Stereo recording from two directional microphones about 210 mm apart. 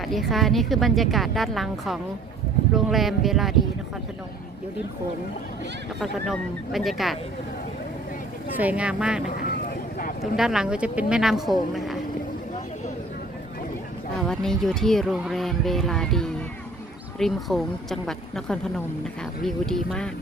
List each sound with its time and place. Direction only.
0.0 s speech: centre (ahead or behind)
6.7 s speech: centre (ahead or behind)
8.5 s speech: 5° right (ahead or behind)
10.3 s speech: centre (ahead or behind)
14.2 s speech: centre (ahead or behind)